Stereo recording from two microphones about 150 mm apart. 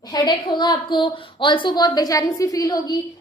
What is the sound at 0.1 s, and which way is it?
A woman's voice, 25° left (ahead or behind).